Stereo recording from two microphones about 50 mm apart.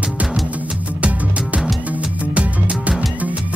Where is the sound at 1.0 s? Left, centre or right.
Right.